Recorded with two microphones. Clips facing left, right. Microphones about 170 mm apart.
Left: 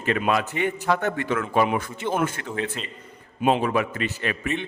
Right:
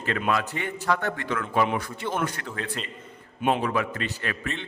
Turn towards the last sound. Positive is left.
turn(degrees=15)  # may be behind; listen again after turning